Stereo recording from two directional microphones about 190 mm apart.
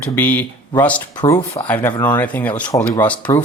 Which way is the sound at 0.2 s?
10° left (ahead or behind).